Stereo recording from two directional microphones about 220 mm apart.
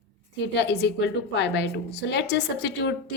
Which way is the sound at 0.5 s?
50° left (ahead or behind).